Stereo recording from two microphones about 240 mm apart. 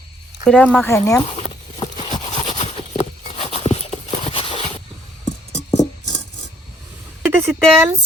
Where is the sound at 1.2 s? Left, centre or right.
Left.